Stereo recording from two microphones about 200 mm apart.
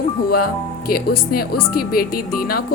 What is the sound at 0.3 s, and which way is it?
A woman's voice, 50° left (ahead or behind).